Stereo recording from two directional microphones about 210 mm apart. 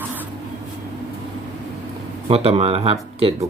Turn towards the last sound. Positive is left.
turn(degrees=-30)  # may be behind; listen again after turning